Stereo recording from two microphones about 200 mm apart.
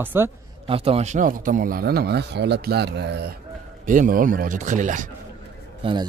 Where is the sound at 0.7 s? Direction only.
30° right (ahead or behind); by 3.4 s 55° right (ahead or behind).